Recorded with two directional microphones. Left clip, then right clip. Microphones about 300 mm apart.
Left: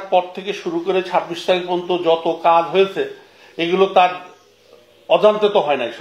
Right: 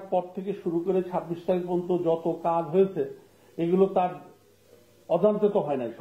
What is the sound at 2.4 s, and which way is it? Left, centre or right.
Speech, centre.